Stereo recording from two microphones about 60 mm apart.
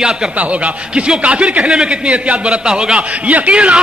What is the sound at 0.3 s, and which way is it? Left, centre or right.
Speech, right.